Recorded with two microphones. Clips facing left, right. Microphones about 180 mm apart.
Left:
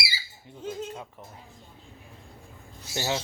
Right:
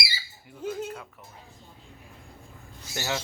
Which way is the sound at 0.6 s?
10° right (ahead or behind).